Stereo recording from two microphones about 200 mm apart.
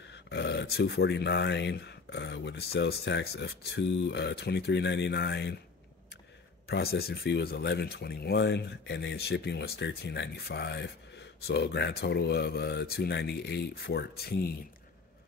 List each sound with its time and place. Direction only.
0.0 s speech: 60° left (ahead or behind)
6.7 s speech: 50° left (ahead or behind)